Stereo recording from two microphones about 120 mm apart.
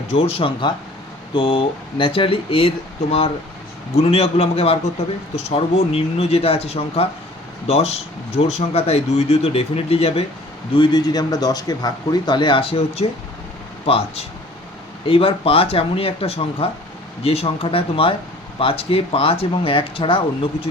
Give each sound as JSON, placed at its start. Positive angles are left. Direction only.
{"t": 0.1, "sound": "speech", "side_deg": 55}
{"t": 10.8, "sound": "speech", "side_deg": 40}